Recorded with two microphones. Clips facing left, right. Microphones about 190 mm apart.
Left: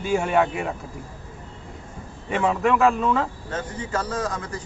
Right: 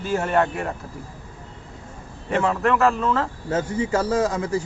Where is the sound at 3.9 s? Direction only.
25° right (ahead or behind).